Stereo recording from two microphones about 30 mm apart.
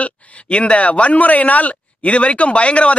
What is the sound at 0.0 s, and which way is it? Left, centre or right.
Speech, left.